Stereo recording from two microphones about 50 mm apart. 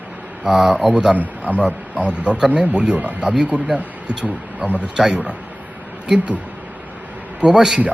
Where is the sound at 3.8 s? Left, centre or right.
Right.